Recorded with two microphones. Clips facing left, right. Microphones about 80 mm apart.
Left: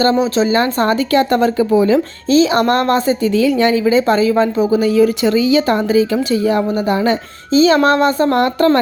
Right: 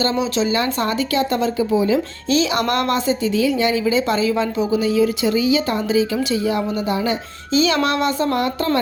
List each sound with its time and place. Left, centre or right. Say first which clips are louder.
0.0 s speech: left 6 dB; left
2.3 s speech: left 6 dB; left
3.2 s a woman's voice: left 5 dB; left
3.8 s speech: left 6 dB; left
7.5 s speech: left 7 dB; left